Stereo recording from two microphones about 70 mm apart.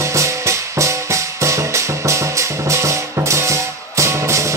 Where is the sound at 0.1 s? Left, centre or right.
Right.